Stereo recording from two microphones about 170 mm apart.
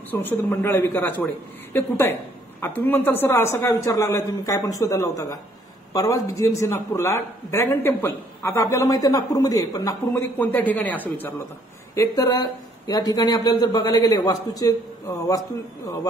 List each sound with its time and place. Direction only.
0.1 s a man's voice: 10° left (ahead or behind)
10.3 s a man's voice: 10° left (ahead or behind)